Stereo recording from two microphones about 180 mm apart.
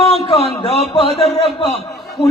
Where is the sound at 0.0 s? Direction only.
35° left (ahead or behind).